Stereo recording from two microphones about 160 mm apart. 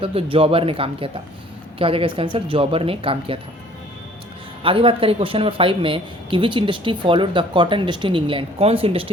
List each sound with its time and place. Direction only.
0.0 s speech: 35° right (ahead or behind)
4.6 s speech: 35° right (ahead or behind)